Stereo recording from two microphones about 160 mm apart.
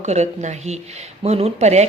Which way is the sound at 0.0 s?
45° right (ahead or behind).